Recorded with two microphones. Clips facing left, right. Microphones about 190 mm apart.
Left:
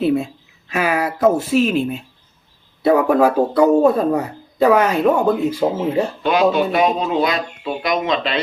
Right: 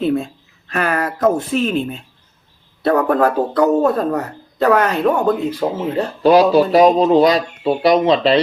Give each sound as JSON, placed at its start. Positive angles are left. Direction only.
{"t": 0.0, "sound": "speech", "side_deg": 5}
{"t": 6.2, "sound": "speech", "side_deg": -35}